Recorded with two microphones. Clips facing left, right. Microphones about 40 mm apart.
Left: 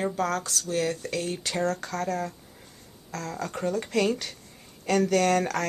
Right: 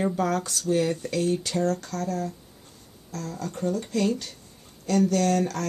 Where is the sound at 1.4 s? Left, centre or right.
Left.